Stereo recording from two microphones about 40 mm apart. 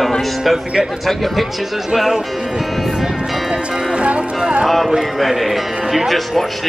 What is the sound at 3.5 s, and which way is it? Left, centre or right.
Music, right.